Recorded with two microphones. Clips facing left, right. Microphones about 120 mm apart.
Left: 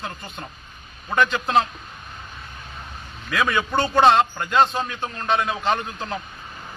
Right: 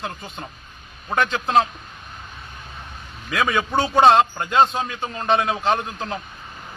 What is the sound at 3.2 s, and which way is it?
A man's voice, 5° right (ahead or behind).